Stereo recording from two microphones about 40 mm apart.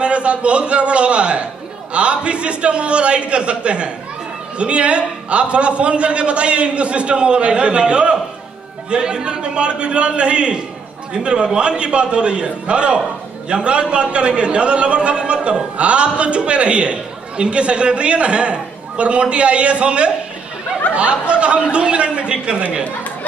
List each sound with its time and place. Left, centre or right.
0.0 s a man's voice: right